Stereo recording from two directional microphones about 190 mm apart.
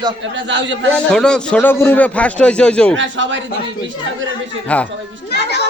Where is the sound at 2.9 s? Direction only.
75° right (ahead or behind).